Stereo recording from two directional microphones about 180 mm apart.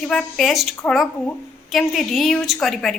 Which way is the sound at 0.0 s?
5° left (ahead or behind).